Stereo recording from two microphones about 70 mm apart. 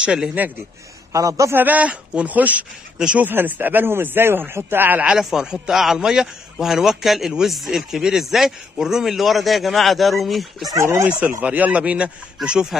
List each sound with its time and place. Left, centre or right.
0.0 s speech: centre
1.1 s a man's voice: right
1.5 s a man's voice: right
3.3 s a man's voice: right
5.0 s a man's voice: centre
10.8 s a man's voice: right
11.1 s speech: centre